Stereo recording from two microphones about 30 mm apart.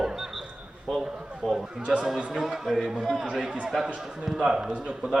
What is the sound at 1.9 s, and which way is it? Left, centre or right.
A man's voice, centre.